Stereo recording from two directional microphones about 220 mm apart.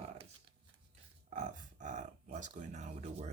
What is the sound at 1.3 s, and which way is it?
Speech, 35° right (ahead or behind).